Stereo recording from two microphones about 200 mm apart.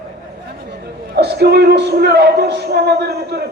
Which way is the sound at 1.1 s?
55° right (ahead or behind).